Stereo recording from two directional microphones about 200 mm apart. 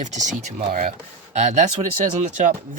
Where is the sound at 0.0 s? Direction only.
35° right (ahead or behind).